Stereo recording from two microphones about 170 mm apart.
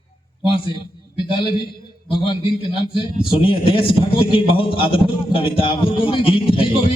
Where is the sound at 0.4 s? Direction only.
30° left (ahead or behind).